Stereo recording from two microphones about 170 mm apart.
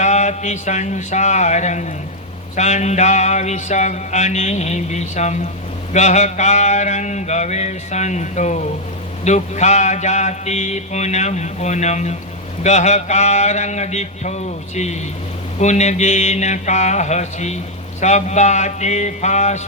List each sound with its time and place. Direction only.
0.0 s mantra: 45° left (ahead or behind)